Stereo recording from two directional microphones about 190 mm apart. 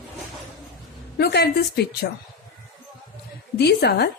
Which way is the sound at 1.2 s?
60° left (ahead or behind).